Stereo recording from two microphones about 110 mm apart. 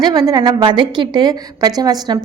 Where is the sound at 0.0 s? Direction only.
35° right (ahead or behind).